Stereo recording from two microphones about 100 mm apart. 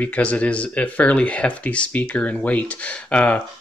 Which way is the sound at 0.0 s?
15° left (ahead or behind).